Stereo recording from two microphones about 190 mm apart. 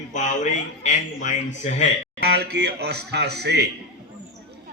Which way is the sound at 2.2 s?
60° right (ahead or behind).